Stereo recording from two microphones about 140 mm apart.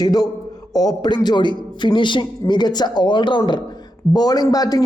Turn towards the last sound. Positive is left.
turn(degrees=25)  # may be behind; listen again after turning